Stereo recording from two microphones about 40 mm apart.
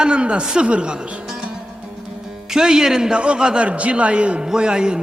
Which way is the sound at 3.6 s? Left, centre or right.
Right.